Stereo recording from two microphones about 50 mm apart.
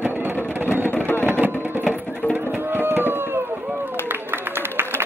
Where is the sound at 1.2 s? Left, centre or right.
Right.